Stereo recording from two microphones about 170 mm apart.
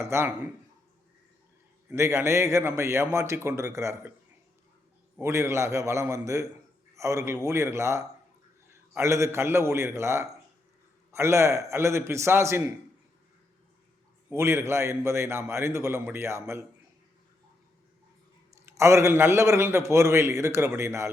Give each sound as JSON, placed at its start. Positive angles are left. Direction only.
{"t": 0.0, "sound": "a man's voice", "side_deg": -15}
{"t": 1.9, "sound": "a man's voice", "side_deg": -15}
{"t": 5.2, "sound": "a man's voice", "side_deg": -15}
{"t": 14.3, "sound": "a man's voice", "side_deg": -15}
{"t": 18.6, "sound": "a man's voice", "side_deg": -15}